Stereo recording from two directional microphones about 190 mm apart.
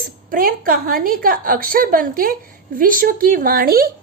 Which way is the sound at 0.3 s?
50° right (ahead or behind).